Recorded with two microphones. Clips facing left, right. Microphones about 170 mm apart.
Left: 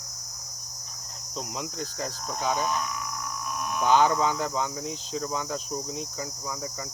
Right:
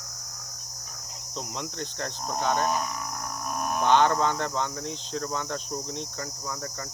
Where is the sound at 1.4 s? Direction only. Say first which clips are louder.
Left 1 dB; 5° left (ahead or behind).